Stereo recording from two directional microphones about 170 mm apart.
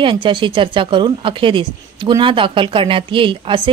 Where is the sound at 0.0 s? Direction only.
30° right (ahead or behind).